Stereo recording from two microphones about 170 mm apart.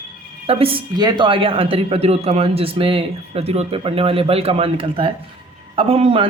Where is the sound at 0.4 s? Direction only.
35° right (ahead or behind).